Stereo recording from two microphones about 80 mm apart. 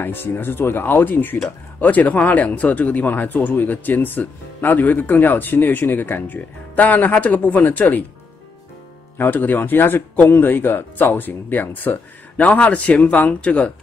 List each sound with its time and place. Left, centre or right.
0.0 s speech: left
9.2 s speech: left